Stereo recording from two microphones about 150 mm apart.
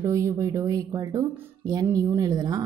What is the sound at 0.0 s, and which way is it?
A woman's voice, 20° right (ahead or behind).